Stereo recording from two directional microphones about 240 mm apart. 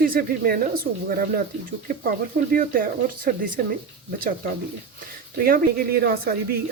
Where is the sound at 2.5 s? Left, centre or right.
Right.